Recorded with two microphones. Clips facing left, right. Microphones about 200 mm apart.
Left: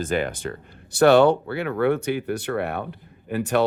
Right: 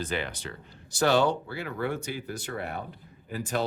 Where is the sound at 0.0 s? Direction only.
50° left (ahead or behind).